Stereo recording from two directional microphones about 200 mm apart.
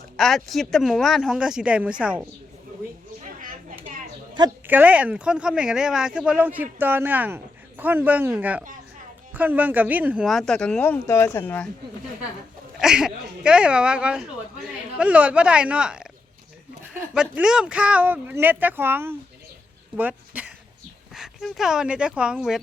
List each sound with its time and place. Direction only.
0.2 s speech: centre (ahead or behind)
3.2 s a sound: 40° right (ahead or behind)
4.6 s speech: 10° right (ahead or behind); by 11.7 s 10° left (ahead or behind)
12.8 s speech: 5° right (ahead or behind)